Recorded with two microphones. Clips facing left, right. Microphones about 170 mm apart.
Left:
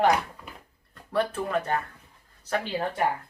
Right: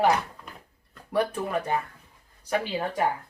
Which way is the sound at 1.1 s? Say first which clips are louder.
Even; 10° right (ahead or behind).